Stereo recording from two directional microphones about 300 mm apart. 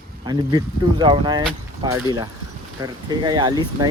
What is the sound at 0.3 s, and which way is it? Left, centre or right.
Speech, centre.